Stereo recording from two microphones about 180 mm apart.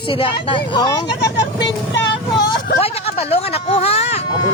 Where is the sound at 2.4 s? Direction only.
35° left (ahead or behind).